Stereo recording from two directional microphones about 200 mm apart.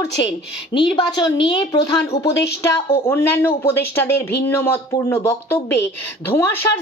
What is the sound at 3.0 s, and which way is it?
Speech, 10° left (ahead or behind).